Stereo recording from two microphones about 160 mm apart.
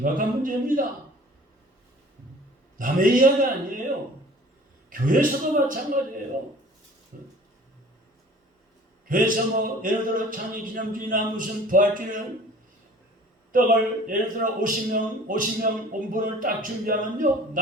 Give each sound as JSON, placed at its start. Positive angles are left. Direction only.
{"t": 0.0, "sound": "a man's voice", "side_deg": -60}
{"t": 2.7, "sound": "a man's voice", "side_deg": -60}
{"t": 4.9, "sound": "a man's voice", "side_deg": -60}
{"t": 7.1, "sound": "a sound", "side_deg": -60}
{"t": 9.0, "sound": "a man's voice", "side_deg": -55}
{"t": 13.5, "sound": "a man's voice", "side_deg": -60}